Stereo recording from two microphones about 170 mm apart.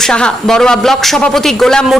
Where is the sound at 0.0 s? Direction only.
5° left (ahead or behind).